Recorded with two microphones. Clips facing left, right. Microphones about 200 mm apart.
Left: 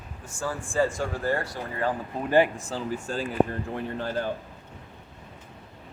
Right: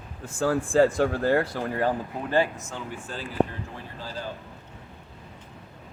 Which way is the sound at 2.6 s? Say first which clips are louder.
Left 5 dB; 35° left (ahead or behind).